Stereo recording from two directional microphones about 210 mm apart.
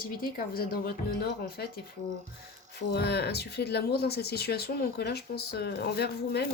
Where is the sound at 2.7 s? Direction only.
50° left (ahead or behind).